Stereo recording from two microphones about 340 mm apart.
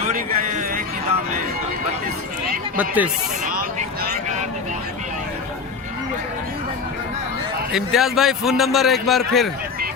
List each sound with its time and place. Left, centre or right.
0.0 s a sound: right
2.7 s a man's voice: centre
3.4 s vehicle: right
7.7 s a man's voice: centre